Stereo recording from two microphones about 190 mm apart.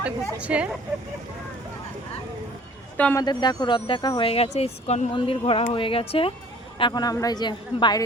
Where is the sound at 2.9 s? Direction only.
10° left (ahead or behind).